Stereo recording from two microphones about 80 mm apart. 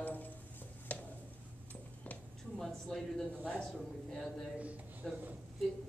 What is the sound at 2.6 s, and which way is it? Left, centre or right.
Speech, centre.